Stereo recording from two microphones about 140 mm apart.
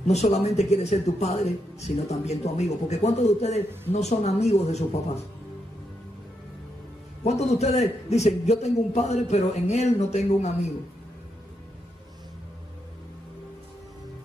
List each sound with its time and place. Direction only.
0.0 s speech: 50° left (ahead or behind)
7.2 s speech: 50° left (ahead or behind)